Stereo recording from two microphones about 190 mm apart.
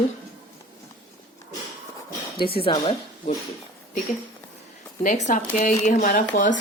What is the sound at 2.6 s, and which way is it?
Speech, 30° left (ahead or behind).